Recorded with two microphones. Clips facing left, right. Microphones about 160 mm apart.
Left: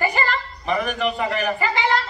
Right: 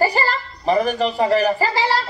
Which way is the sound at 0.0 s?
35° right (ahead or behind).